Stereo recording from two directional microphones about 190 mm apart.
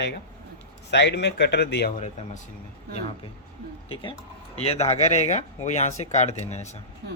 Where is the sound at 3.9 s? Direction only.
25° left (ahead or behind).